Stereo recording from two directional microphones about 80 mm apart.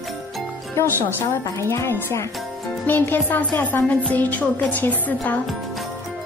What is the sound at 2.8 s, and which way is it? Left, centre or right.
Music, left.